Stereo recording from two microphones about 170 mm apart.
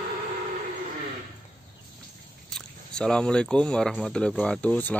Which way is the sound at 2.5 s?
5° left (ahead or behind).